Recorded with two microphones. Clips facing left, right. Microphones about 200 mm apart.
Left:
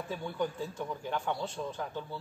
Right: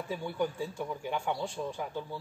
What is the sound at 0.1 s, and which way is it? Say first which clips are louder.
Speech: right 2 dB; 10° right (ahead or behind).